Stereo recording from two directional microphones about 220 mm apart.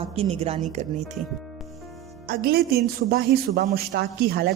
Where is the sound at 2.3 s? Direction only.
45° right (ahead or behind).